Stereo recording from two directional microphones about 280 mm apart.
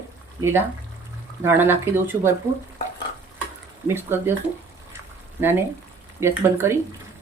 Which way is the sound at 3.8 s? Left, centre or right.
Centre.